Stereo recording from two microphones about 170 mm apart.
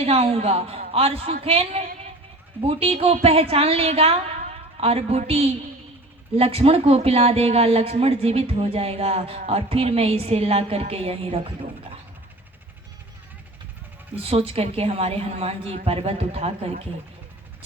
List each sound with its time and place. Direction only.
0.0 s speech: 35° right (ahead or behind)
14.2 s speech: 35° right (ahead or behind)